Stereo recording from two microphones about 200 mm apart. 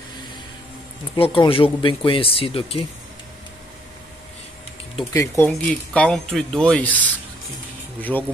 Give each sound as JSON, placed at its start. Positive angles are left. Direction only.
{"t": 1.1, "sound": "speech", "side_deg": 25}
{"t": 5.1, "sound": "speech", "side_deg": 15}
{"t": 8.0, "sound": "speech", "side_deg": 10}